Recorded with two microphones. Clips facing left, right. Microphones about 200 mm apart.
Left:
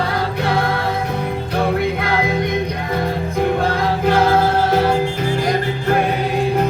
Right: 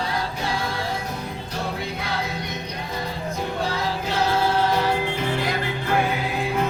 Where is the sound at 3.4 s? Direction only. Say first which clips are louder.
Left 9 dB; 55° left (ahead or behind).